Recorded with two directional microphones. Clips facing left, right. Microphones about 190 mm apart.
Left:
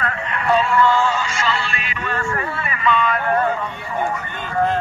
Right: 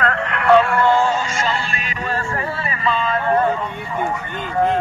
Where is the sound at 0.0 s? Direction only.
65° right (ahead or behind).